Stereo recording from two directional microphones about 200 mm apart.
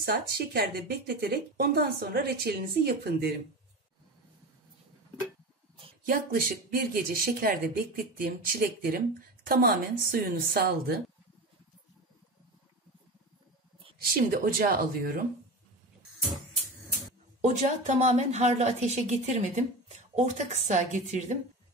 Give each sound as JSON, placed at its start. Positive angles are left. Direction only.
{"t": 0.0, "sound": "speech", "side_deg": -50}
{"t": 6.0, "sound": "speech", "side_deg": -45}
{"t": 14.0, "sound": "speech", "side_deg": -45}
{"t": 17.4, "sound": "a woman's voice", "side_deg": -35}